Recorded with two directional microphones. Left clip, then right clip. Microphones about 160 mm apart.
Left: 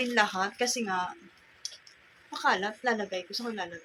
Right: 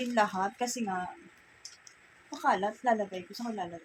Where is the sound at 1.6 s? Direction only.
15° right (ahead or behind).